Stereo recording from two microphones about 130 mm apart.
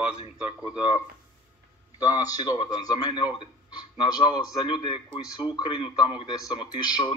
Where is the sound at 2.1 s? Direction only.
30° left (ahead or behind).